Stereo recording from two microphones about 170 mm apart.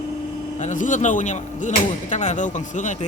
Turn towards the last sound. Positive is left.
turn(degrees=45)  # may be behind; listen again after turning